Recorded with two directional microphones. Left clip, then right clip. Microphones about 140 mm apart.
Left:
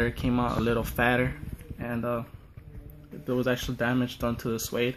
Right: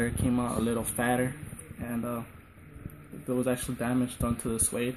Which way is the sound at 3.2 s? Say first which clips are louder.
Left 2 dB; 20° left (ahead or behind).